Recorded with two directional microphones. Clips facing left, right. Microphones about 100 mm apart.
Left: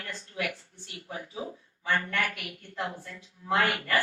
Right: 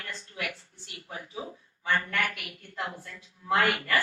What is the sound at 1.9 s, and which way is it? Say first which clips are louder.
A woman's voice: even; 30° left (ahead or behind).